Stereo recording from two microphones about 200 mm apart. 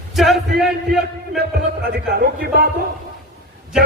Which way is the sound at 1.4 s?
50° right (ahead or behind).